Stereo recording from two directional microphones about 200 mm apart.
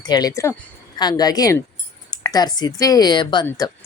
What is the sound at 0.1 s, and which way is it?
Speech, 20° left (ahead or behind).